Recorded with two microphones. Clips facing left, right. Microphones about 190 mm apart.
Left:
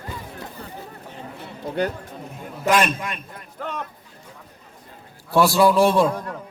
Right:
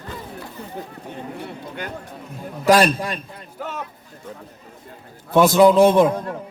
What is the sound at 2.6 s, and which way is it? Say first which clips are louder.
Speech: right 5 dB; 35° right (ahead or behind).